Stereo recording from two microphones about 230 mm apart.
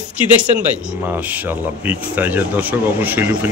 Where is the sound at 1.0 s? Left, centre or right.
Centre.